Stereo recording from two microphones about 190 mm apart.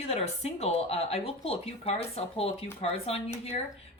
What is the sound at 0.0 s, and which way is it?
Speech, 35° left (ahead or behind).